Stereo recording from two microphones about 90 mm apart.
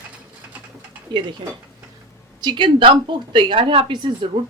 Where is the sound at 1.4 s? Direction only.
60° right (ahead or behind).